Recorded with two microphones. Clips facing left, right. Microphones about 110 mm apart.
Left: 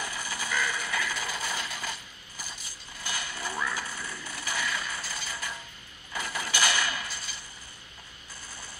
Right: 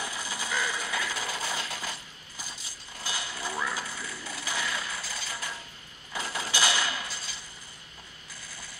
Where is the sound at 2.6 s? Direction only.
15° right (ahead or behind).